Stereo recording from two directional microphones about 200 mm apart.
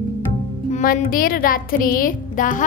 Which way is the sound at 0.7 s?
40° left (ahead or behind).